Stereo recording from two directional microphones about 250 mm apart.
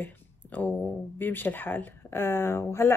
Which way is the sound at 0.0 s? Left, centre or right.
Centre.